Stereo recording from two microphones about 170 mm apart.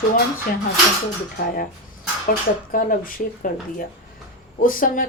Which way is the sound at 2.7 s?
55° left (ahead or behind).